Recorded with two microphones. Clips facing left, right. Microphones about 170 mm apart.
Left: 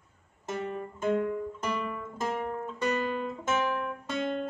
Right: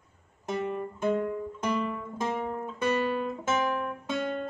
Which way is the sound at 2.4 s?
10° right (ahead or behind).